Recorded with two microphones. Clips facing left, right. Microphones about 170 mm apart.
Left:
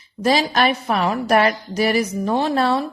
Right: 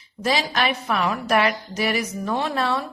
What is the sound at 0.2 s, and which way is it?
A woman's voice, 40° left (ahead or behind).